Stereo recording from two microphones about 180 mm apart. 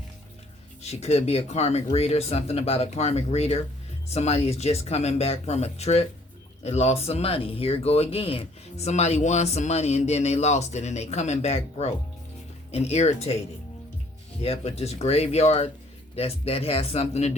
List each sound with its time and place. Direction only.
0.8 s speech: 35° left (ahead or behind)
14.4 s speech: 35° left (ahead or behind)